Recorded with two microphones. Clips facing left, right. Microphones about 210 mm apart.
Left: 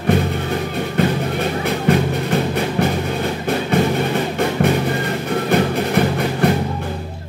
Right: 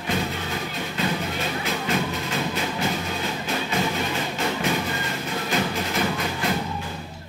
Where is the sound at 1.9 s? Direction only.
60° left (ahead or behind).